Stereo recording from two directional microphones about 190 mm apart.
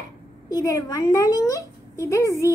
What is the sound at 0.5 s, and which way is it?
A woman's voice, 15° left (ahead or behind).